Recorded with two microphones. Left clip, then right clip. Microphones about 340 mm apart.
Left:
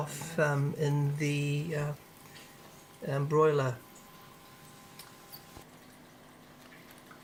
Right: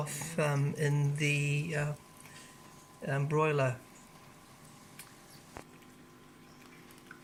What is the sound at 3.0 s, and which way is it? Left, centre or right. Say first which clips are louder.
Speech: left 4 dB; centre.